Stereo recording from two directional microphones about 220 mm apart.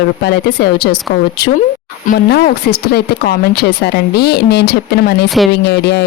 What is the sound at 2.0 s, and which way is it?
Speech, 45° left (ahead or behind).